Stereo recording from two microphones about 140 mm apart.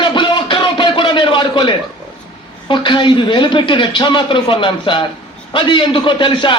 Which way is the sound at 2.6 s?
35° left (ahead or behind).